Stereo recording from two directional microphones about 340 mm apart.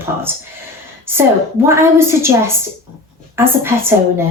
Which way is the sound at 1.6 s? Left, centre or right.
Centre.